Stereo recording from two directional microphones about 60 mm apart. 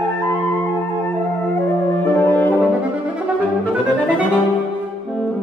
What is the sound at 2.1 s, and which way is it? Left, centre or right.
French horn, left.